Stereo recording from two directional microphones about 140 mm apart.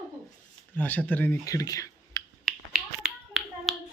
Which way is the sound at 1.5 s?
25° left (ahead or behind).